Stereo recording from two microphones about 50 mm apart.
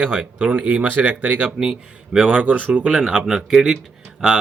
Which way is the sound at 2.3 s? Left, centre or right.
Right.